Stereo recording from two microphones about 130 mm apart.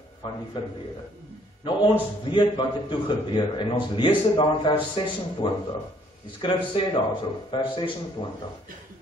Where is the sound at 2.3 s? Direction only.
40° left (ahead or behind).